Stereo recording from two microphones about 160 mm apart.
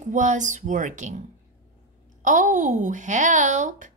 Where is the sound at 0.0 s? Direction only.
50° right (ahead or behind).